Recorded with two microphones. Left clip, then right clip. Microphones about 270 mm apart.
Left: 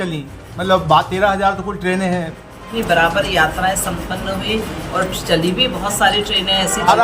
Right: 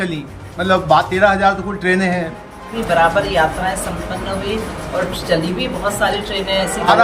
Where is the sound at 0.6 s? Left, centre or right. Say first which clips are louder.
Even; left.